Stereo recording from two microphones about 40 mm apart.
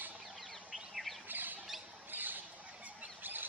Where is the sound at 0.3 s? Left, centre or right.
Centre.